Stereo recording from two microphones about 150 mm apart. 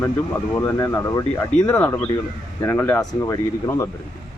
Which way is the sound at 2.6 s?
15° left (ahead or behind).